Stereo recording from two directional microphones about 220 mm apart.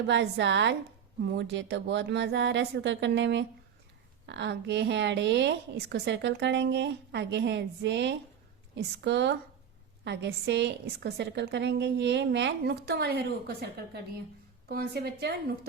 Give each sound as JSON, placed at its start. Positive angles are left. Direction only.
{"t": 0.1, "sound": "a woman's voice", "side_deg": -55}